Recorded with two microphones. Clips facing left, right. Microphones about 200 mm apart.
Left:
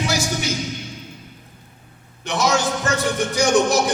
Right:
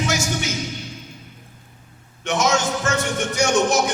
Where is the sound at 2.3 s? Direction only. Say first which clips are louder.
Even; 35° left (ahead or behind).